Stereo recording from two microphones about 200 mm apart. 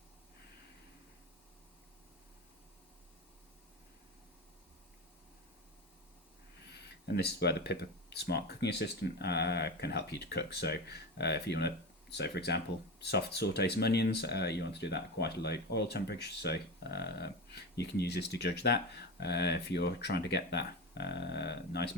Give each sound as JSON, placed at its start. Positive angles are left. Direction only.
{"t": 7.2, "sound": "speech", "side_deg": 55}